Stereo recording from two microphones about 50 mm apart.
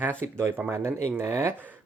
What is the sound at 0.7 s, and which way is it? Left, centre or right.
Speech, right.